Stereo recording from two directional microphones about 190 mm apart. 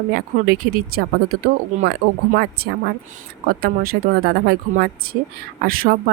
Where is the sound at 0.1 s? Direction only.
50° right (ahead or behind).